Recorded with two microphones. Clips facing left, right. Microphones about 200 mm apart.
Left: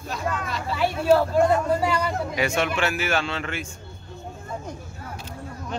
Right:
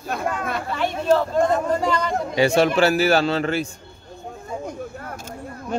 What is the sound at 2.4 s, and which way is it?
A man's voice, 35° right (ahead or behind).